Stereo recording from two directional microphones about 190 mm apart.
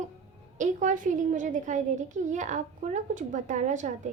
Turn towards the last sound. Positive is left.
turn(degrees=-40)  # may be behind; listen again after turning